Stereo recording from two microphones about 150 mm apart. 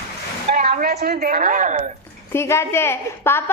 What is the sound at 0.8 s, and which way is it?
Speech, 90° right.